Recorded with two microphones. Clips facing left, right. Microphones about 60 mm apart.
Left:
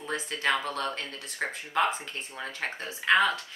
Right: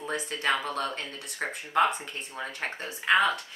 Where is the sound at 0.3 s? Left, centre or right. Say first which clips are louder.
Left 1 dB; centre.